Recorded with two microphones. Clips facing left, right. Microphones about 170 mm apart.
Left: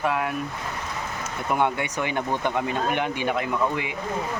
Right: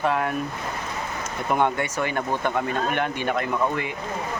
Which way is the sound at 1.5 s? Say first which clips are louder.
Right 1 dB; 15° left (ahead or behind).